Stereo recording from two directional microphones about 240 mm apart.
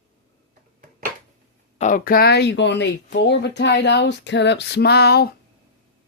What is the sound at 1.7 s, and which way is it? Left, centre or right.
Speech, left.